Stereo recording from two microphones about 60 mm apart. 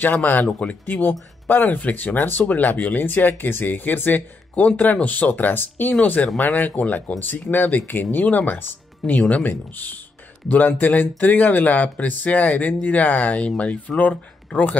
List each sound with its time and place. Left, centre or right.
0.0 s speech: left